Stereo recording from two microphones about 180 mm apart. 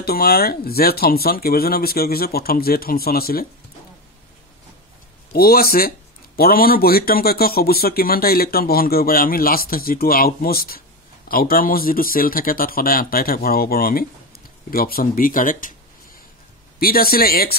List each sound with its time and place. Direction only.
0.0 s speech: 60° left (ahead or behind)
5.3 s speech: 60° left (ahead or behind)
16.8 s speech: 55° left (ahead or behind)